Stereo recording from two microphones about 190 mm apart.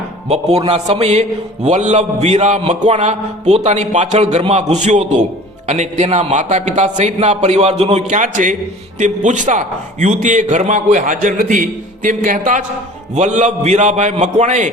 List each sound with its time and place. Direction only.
0.3 s a man's voice: 35° right (ahead or behind)